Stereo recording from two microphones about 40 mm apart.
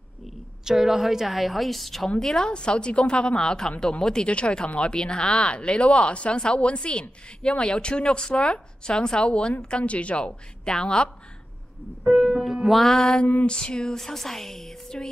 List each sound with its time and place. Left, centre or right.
0.7 s a woman's voice: centre
2.0 s speech: centre
12.1 s a woman's voice: centre
13.0 s speech: left